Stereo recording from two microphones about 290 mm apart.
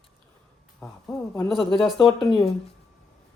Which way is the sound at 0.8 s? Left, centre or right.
Centre.